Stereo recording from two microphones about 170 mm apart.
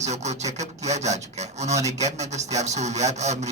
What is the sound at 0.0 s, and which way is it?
Speech, 40° right (ahead or behind).